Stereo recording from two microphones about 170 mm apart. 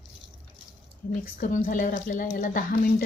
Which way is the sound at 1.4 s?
55° left (ahead or behind).